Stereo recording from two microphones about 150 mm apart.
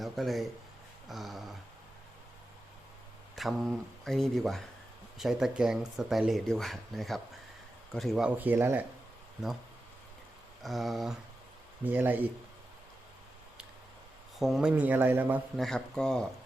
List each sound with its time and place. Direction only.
0.0 s speech: centre (ahead or behind)
3.3 s speech: centre (ahead or behind)
8.4 s speech: 15° right (ahead or behind)
10.6 s speech: centre (ahead or behind)
11.9 s speech: 10° right (ahead or behind)
14.3 s speech: centre (ahead or behind)
15.5 s speech: centre (ahead or behind)